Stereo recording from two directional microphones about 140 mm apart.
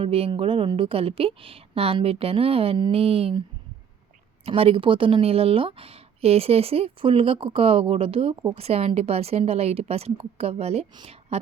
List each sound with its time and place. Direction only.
0.0 s a woman's voice: 45° right (ahead or behind)
4.4 s a woman's voice: 45° right (ahead or behind)